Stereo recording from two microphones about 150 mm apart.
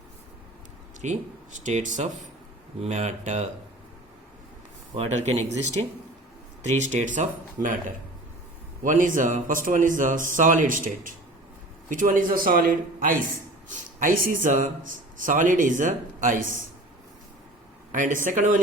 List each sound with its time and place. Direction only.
1.0 s speech: 50° right (ahead or behind)
4.9 s speech: 45° right (ahead or behind)
6.6 s speech: 50° right (ahead or behind)
8.8 s speech: 60° right (ahead or behind)
17.9 s speech: 60° right (ahead or behind)